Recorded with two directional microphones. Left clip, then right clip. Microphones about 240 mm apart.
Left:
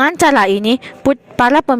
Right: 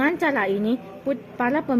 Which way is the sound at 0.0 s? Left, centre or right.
Left.